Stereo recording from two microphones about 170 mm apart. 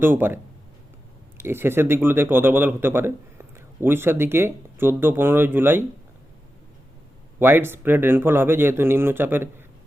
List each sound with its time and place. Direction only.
0.0 s speech: 10° right (ahead or behind)
1.4 s speech: 15° right (ahead or behind)
7.3 s speech: 10° right (ahead or behind)